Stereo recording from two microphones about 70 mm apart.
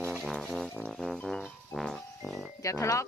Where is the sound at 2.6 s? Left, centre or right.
Left.